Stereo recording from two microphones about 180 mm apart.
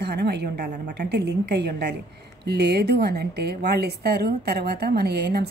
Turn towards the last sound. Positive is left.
turn(degrees=-65)  # may be behind; listen again after turning